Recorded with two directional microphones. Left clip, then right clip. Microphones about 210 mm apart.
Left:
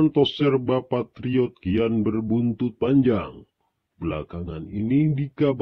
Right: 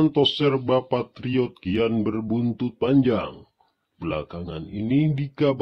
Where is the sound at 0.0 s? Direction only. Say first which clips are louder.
Even; 40° left (ahead or behind).